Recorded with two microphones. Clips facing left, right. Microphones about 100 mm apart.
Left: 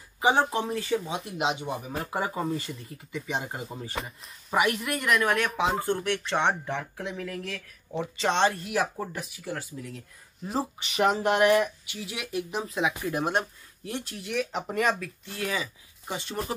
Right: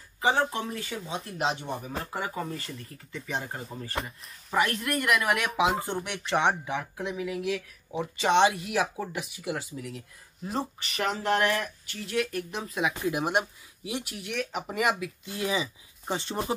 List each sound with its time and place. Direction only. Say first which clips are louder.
0.2 s speech: left 2 dB; 25° left (ahead or behind)
1.4 s speech: left 1 dB; 5° left (ahead or behind)
2.1 s speech: left 6 dB; 25° left (ahead or behind); by 11.0 s centre (ahead or behind)
11.0 s speech: left 4 dB; 20° left (ahead or behind)
11.9 s speech: right 4 dB; 5° left (ahead or behind)
13.0 s speech: even; 15° right (ahead or behind); by 16.5 s 30° right (ahead or behind)